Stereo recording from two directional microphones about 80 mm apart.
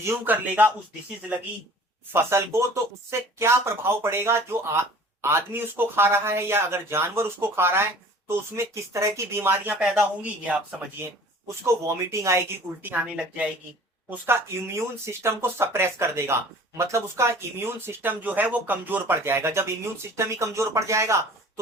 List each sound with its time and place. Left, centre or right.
0.0 s speech: right
2.1 s speech: right
11.4 s speech: right
12.8 s speech: centre
14.1 s speech: right